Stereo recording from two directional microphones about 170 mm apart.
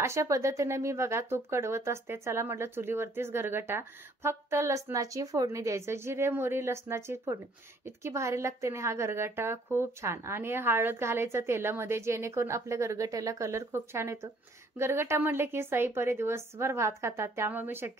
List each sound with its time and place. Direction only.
0.0 s speech: 15° right (ahead or behind)